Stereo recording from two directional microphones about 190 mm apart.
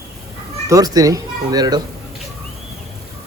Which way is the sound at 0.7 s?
20° right (ahead or behind).